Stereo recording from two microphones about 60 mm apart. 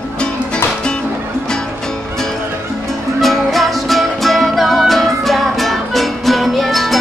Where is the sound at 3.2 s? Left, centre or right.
Centre.